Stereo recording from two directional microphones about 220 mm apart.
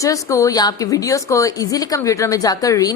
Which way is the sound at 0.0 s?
15° left (ahead or behind).